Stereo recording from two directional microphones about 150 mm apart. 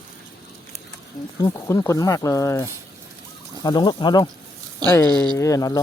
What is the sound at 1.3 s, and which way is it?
Speech, 25° left (ahead or behind).